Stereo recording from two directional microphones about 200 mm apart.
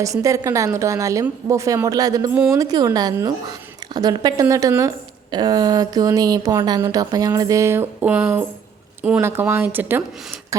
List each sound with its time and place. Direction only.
0.0 s speech: 15° right (ahead or behind)
10.5 s beatboxing: 15° right (ahead or behind)